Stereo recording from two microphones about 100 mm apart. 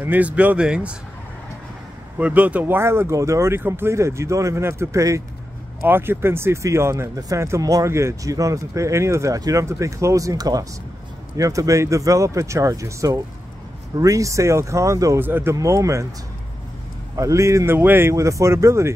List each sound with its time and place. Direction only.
0.0 s speech: 15° right (ahead or behind)
2.1 s speech: 15° right (ahead or behind); by 15.1 s 30° right (ahead or behind)
15.1 s speech: 20° right (ahead or behind)
15.5 s speech: 30° right (ahead or behind)
17.1 s speech: 30° right (ahead or behind)